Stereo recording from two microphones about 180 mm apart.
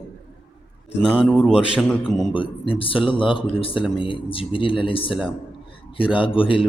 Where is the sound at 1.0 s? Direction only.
5° right (ahead or behind).